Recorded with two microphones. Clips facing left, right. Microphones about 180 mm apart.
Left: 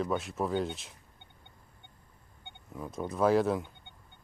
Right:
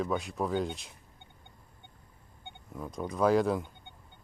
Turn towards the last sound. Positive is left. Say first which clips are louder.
# even
turn(degrees=0)  # may be behind; listen again after turning